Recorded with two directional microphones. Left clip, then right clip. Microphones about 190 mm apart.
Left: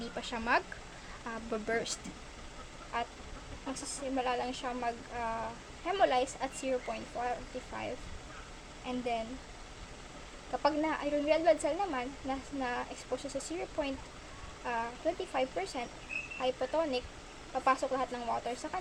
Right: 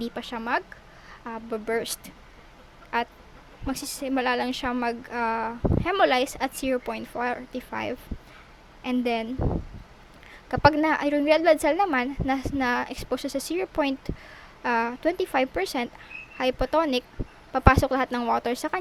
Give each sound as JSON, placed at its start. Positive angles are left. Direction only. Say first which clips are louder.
{"t": 0.0, "sound": "speech", "louder": "right 6 dB", "side_deg": -30}
{"t": 2.9, "sound": "a woman's voice", "louder": "right 9 dB", "side_deg": -50}
{"t": 10.6, "sound": "speech", "louder": "right 11 dB", "side_deg": -50}